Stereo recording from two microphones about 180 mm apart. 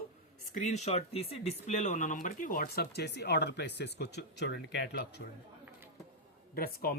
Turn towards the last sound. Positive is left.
turn(degrees=60)  # may be behind; listen again after turning